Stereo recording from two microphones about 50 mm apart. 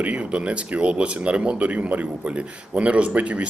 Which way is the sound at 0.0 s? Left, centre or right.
Right.